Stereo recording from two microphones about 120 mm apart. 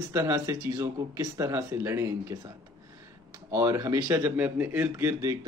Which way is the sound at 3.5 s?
25° right (ahead or behind).